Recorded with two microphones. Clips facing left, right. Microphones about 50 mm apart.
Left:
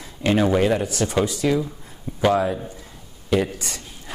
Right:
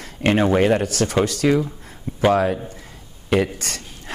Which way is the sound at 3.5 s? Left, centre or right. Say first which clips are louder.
Right 2 dB; right.